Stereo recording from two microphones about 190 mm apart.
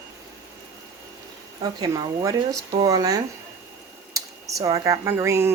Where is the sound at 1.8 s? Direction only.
20° right (ahead or behind).